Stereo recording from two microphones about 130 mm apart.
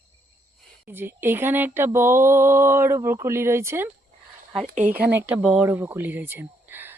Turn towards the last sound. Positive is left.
turn(degrees=-15)  # may be behind; listen again after turning